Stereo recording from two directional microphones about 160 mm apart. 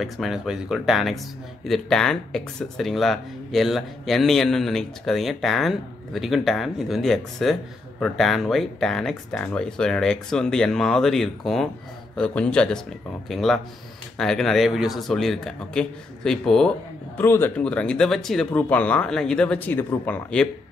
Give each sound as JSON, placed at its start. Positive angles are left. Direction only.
{"t": 0.0, "sound": "speech", "side_deg": 0}